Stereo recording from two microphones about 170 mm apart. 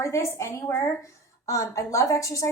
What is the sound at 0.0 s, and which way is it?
A woman's voice, 15° left (ahead or behind).